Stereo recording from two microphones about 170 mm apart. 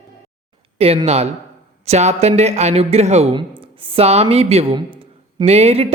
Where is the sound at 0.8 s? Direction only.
35° right (ahead or behind).